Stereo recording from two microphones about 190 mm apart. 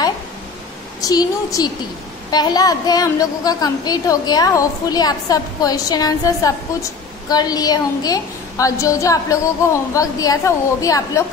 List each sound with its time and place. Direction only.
1.0 s a woman's voice: 20° left (ahead or behind)